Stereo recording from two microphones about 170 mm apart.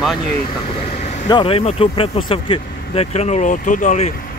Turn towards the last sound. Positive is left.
turn(degrees=45)  # may be behind; listen again after turning